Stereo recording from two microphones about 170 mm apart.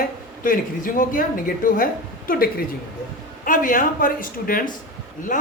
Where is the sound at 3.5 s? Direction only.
55° left (ahead or behind).